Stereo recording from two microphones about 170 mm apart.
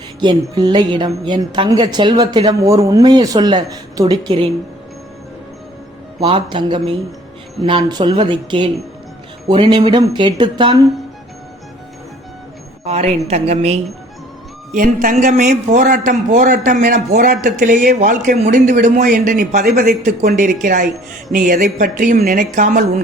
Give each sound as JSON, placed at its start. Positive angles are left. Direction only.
{"t": 0.2, "sound": "a woman's voice", "side_deg": -25}
{"t": 6.1, "sound": "a woman's voice", "side_deg": -30}
{"t": 12.8, "sound": "a woman's voice", "side_deg": -40}
{"t": 14.7, "sound": "a man's voice", "side_deg": -55}